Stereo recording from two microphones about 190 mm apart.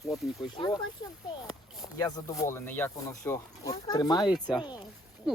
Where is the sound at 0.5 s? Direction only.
25° left (ahead or behind).